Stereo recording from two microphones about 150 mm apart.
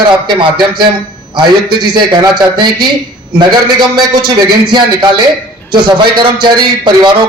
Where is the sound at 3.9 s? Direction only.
30° right (ahead or behind).